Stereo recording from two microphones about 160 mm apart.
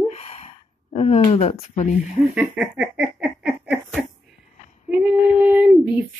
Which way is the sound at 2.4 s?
5° right (ahead or behind).